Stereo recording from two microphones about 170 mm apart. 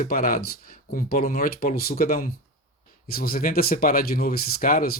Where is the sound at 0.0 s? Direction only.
60° left (ahead or behind).